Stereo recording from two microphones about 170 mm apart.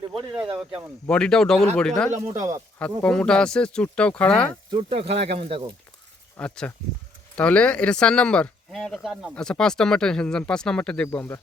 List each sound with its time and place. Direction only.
0.4 s speech: 30° right (ahead or behind)
1.0 s speech: 5° left (ahead or behind)
2.1 s speech: 40° right (ahead or behind)
3.0 s speech: 5° left (ahead or behind)
4.7 s speech: 35° right (ahead or behind)
6.3 s speech: 10° left (ahead or behind)